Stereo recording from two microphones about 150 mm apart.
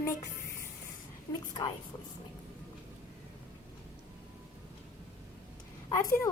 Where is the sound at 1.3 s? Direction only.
25° left (ahead or behind).